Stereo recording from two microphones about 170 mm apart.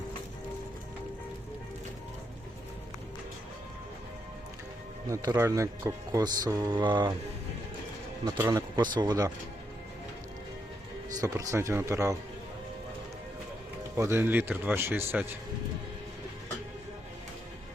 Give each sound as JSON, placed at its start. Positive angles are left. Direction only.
{"t": 5.0, "sound": "speech", "side_deg": -20}
{"t": 8.2, "sound": "speech", "side_deg": -20}
{"t": 11.2, "sound": "speech", "side_deg": -20}
{"t": 13.9, "sound": "speech", "side_deg": -15}